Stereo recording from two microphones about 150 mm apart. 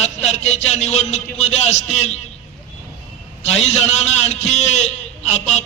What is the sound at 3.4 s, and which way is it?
A man's voice, 50° left (ahead or behind).